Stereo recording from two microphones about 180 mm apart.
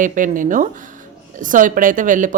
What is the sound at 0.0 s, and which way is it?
Speech, 45° right (ahead or behind).